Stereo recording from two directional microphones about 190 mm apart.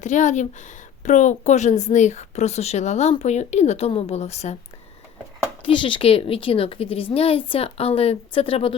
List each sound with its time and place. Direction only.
0.0 s a woman's voice: 40° left (ahead or behind)
5.6 s a woman's voice: 25° left (ahead or behind)